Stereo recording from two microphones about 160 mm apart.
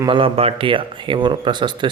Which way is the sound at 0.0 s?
30° right (ahead or behind).